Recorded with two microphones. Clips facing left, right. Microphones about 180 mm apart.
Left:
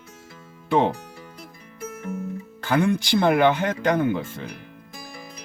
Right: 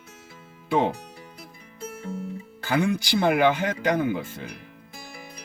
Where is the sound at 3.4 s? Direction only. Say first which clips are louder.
Left 2 dB; 55° left (ahead or behind).